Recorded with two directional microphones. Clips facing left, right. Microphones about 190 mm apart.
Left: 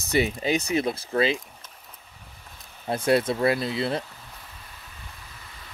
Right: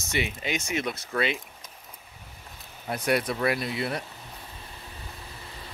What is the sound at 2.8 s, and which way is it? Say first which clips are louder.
Speech: left 4 dB; 30° left (ahead or behind).